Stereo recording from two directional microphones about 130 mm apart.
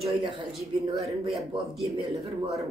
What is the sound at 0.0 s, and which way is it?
Speech, 40° right (ahead or behind).